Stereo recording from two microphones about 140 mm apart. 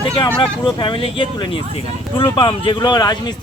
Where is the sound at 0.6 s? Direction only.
35° left (ahead or behind).